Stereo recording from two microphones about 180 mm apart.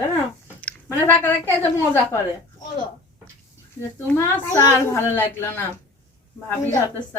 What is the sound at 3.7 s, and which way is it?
Speech, 15° left (ahead or behind).